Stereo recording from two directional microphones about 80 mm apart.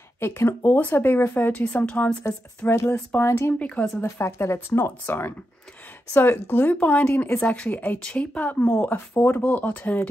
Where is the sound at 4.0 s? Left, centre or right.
Left; by 8.9 s centre.